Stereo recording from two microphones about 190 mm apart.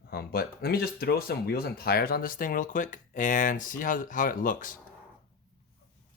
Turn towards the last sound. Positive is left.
turn(degrees=45)  # may be behind; listen again after turning